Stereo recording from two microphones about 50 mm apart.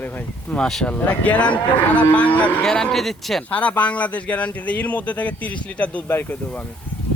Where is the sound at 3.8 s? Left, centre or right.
Left.